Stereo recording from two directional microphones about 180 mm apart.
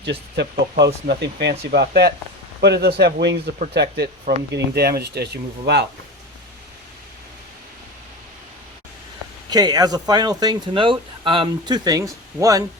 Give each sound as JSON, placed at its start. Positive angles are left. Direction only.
{"t": 0.0, "sound": "speech", "side_deg": -70}
{"t": 9.5, "sound": "speech", "side_deg": -20}